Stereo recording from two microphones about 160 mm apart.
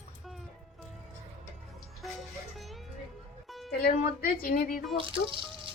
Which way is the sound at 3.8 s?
70° left (ahead or behind).